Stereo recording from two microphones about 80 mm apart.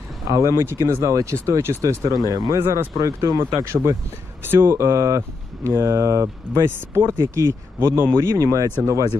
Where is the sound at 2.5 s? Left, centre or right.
Right.